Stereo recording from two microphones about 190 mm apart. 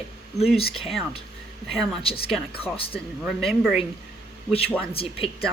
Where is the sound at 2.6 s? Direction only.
30° left (ahead or behind).